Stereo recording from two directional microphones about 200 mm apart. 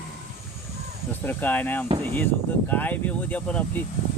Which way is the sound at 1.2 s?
10° left (ahead or behind).